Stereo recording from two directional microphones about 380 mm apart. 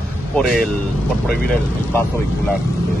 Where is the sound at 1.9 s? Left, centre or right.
Centre.